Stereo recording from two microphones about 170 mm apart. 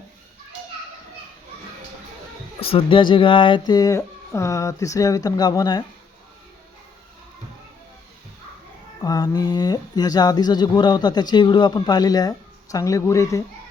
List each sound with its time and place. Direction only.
2.6 s speech: 35° left (ahead or behind)
9.0 s speech: 20° left (ahead or behind)